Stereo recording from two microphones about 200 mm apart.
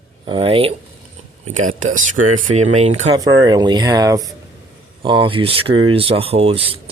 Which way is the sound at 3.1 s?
20° right (ahead or behind).